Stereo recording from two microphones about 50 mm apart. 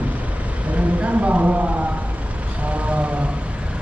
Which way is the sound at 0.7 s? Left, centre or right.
Right.